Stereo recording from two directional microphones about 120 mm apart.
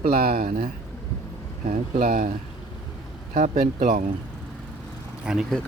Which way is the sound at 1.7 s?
75° right (ahead or behind).